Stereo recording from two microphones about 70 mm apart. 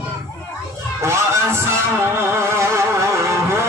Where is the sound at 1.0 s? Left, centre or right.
Right.